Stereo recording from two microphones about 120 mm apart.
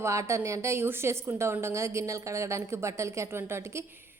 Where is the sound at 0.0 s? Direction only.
25° right (ahead or behind).